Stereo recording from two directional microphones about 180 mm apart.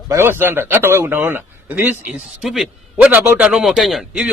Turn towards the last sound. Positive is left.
turn(degrees=0)  # may be behind; listen again after turning